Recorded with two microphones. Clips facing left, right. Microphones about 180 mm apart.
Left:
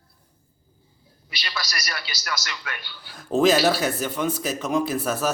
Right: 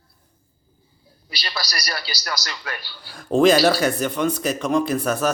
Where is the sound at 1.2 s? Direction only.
35° right (ahead or behind).